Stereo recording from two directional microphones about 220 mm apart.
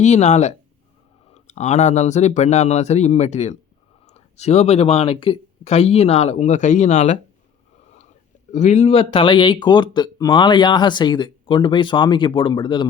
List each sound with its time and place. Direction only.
0.0 s speech: 30° left (ahead or behind)
8.5 s speech: 30° left (ahead or behind)